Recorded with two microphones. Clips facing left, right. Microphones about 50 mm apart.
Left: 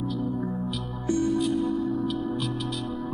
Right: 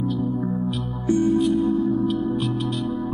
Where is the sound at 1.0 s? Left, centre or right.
Centre.